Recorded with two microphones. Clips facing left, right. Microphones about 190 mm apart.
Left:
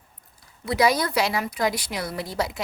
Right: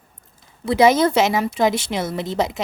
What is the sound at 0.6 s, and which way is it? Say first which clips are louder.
A woman's voice: right 7 dB; 25° right (ahead or behind).